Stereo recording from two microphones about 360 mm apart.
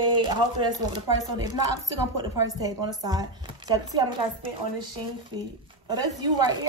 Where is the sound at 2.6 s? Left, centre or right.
Centre.